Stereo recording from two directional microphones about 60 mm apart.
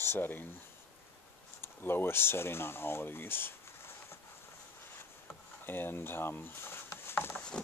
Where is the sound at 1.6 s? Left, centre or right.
Left.